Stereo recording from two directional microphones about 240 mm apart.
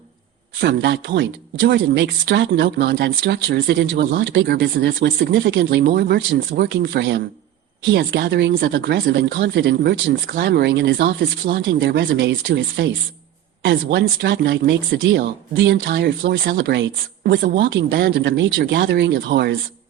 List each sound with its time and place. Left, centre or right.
0.6 s speech: right